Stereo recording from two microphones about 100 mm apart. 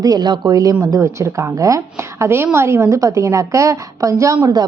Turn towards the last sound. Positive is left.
turn(degrees=-40)  # may be behind; listen again after turning